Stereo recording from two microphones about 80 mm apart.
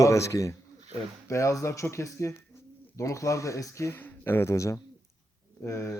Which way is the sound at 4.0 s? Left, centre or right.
Left.